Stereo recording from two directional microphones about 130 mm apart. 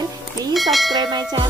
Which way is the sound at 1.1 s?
30° right (ahead or behind).